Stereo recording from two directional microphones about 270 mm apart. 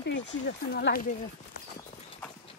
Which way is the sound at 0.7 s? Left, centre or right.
Left.